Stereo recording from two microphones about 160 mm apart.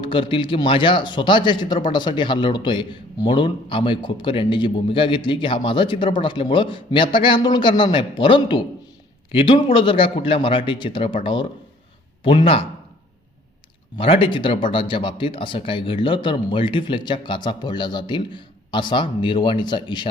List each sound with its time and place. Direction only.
0.0 s a man's voice: 30° left (ahead or behind)
13.9 s a man's voice: 35° left (ahead or behind)